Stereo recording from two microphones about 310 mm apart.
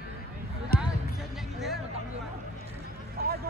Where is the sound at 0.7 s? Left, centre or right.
Left.